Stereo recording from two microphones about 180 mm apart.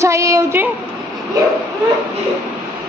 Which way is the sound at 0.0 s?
15° right (ahead or behind).